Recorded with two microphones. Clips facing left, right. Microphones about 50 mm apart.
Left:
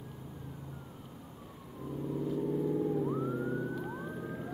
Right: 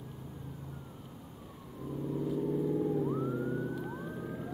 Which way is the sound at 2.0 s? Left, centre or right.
Centre.